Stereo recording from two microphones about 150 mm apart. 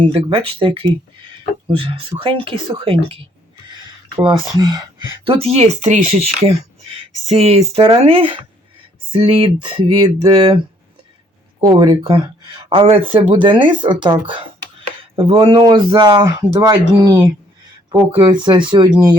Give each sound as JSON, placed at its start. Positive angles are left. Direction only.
{"t": 0.0, "sound": "speech", "side_deg": -35}
{"t": 4.2, "sound": "speech", "side_deg": -30}
{"t": 5.2, "sound": "speech", "side_deg": -40}
{"t": 11.6, "sound": "speech", "side_deg": -25}